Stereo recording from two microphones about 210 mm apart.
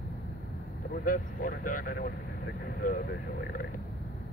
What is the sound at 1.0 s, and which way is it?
Speech, 40° left (ahead or behind).